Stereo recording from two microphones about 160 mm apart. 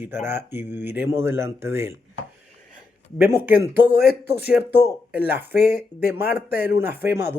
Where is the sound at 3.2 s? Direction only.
15° right (ahead or behind).